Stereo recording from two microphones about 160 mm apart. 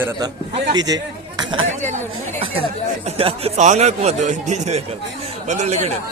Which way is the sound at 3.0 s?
35° right (ahead or behind).